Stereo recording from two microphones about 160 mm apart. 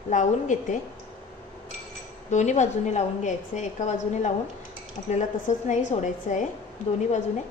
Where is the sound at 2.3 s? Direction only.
45° left (ahead or behind).